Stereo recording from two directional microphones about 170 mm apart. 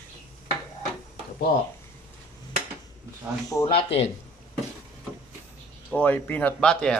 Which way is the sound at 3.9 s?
35° left (ahead or behind).